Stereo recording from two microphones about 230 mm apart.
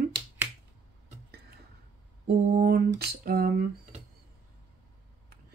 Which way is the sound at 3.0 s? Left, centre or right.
Right.